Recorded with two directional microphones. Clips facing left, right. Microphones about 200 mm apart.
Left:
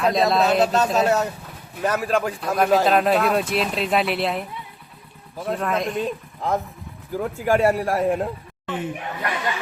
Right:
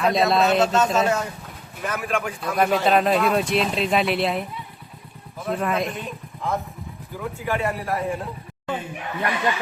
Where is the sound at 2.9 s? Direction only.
Centre (ahead or behind).